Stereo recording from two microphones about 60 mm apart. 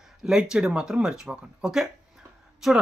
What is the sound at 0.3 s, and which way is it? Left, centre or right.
Speech, centre.